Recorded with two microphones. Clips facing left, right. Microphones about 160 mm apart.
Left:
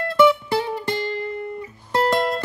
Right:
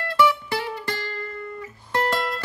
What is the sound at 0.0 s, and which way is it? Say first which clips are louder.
Music: left 5 dB; 25° left (ahead or behind).